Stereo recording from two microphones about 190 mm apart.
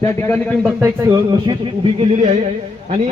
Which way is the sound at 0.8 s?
20° right (ahead or behind).